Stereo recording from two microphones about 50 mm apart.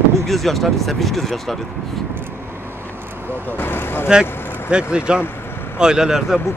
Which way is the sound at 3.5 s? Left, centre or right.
Left.